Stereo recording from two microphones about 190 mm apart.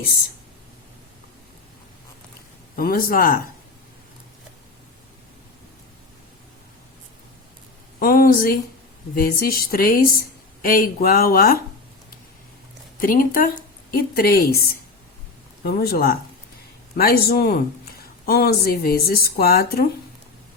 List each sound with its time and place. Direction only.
2.7 s speech: 50° left (ahead or behind)
7.9 s speech: 50° left (ahead or behind)
13.0 s speech: 45° left (ahead or behind)